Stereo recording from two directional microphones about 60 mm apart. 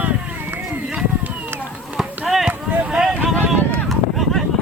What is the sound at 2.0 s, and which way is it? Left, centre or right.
Run, centre.